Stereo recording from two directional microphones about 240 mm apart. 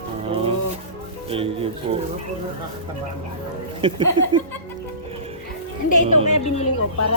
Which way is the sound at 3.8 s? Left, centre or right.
Right.